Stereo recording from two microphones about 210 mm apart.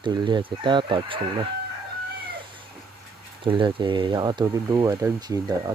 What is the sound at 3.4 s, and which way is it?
Speech, 25° right (ahead or behind).